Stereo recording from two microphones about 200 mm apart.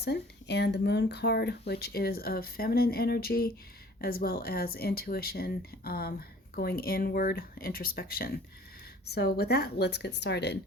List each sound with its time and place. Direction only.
0.0 s a woman's voice: 55° left (ahead or behind)